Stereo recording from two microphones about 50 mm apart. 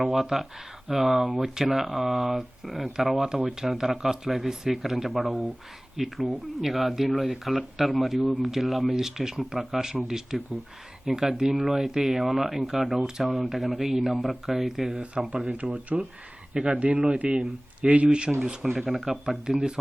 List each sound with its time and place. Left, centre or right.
0.0 s speech: centre
15.3 s speech: right
18.3 s speech: centre